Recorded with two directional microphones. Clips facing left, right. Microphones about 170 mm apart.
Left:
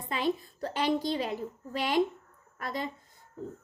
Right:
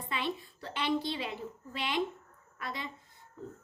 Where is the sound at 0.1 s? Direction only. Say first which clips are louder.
Left 6 dB; 40° left (ahead or behind).